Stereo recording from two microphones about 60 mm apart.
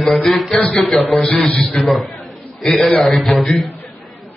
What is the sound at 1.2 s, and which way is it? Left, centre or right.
Speech, left.